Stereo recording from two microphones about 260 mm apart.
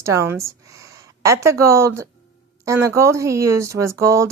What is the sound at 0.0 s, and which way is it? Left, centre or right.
A woman's voice, centre.